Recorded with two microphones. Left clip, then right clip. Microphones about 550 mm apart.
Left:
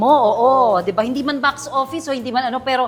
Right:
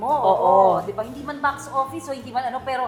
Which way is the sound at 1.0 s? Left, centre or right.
Left.